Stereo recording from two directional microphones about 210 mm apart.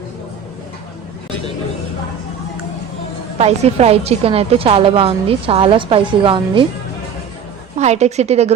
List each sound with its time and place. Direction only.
3.3 s a woman's voice: 30° right (ahead or behind)
7.8 s a woman's voice: 30° right (ahead or behind)